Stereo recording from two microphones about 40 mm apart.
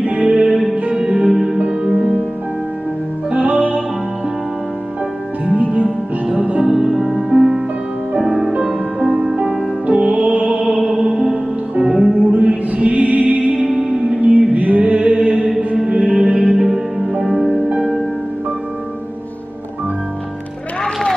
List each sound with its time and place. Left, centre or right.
0.0 s music: right
1.2 s music: centre
1.6 s music: right
3.3 s music: right
5.4 s music: right
8.2 s music: centre
9.8 s music: right
13.7 s music: right
14.5 s music: right
17.3 s music: centre